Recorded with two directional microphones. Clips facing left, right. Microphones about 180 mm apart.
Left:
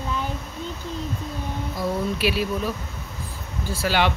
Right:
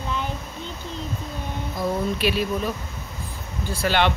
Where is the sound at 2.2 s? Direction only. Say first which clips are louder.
Even; 5° left (ahead or behind).